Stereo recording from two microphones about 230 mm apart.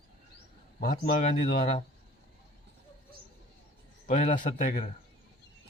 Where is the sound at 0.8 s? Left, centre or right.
Left.